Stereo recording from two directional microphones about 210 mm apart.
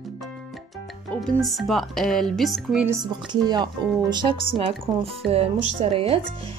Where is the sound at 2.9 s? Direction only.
20° right (ahead or behind).